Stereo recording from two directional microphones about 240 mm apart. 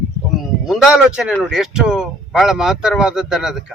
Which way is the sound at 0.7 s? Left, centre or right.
Centre.